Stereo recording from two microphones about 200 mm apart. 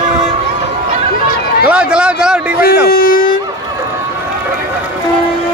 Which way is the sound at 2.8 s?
45° left (ahead or behind).